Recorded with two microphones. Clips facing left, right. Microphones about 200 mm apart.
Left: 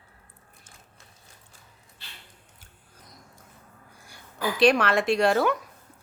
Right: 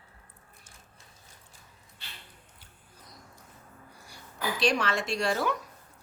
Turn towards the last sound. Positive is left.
turn(degrees=60)  # may be behind; listen again after turning